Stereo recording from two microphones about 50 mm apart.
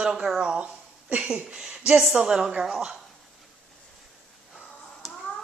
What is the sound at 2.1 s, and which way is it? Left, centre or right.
Speech, centre.